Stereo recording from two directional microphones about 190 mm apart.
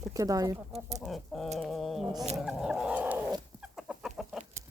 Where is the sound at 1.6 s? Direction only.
Centre (ahead or behind).